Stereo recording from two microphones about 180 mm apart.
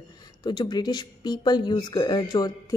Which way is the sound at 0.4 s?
25° left (ahead or behind).